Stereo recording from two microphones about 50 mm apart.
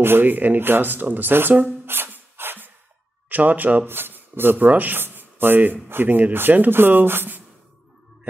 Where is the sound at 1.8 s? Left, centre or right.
Right.